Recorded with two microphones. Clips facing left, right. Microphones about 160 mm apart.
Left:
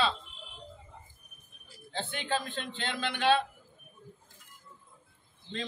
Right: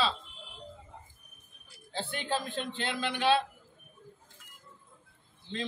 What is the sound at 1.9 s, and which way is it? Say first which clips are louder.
A man's voice: even; 5° right (ahead or behind).